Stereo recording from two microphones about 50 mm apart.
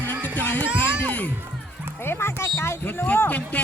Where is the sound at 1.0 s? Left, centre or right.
Left.